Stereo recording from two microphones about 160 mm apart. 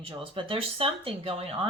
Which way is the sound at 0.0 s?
30° right (ahead or behind).